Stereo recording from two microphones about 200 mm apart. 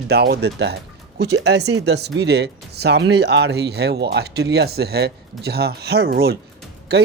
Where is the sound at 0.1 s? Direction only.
55° right (ahead or behind).